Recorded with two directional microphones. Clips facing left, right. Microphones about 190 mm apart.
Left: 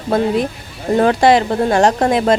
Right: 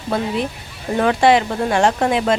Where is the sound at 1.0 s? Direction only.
35° left (ahead or behind).